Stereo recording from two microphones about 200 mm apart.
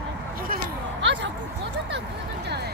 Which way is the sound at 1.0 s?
65° right (ahead or behind).